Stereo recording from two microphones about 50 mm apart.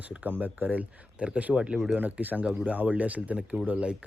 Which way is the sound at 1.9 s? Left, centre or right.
Right.